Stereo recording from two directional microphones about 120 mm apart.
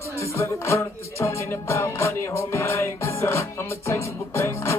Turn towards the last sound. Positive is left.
turn(degrees=20)  # may be behind; listen again after turning